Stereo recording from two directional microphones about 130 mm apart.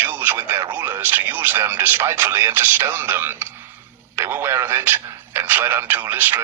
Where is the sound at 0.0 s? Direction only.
15° right (ahead or behind).